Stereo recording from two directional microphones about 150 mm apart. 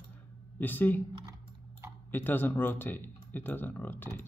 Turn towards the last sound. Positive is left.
turn(degrees=15)  # may be behind; listen again after turning